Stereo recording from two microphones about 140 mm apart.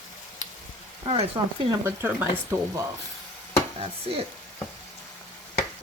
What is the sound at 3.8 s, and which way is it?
Stir, 40° right (ahead or behind).